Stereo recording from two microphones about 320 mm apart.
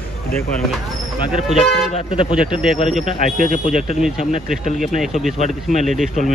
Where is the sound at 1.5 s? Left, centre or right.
Centre.